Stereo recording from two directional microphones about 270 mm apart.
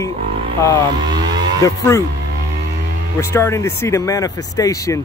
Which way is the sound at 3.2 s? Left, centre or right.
Centre.